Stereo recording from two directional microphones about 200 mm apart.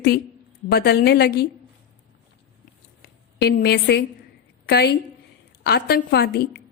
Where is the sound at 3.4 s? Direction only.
55° left (ahead or behind).